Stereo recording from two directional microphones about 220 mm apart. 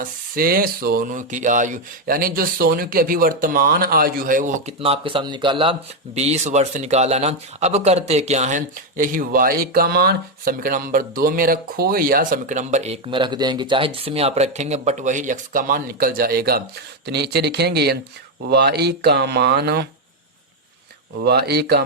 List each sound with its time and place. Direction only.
0.0 s speech: 40° right (ahead or behind)
21.2 s speech: 45° right (ahead or behind)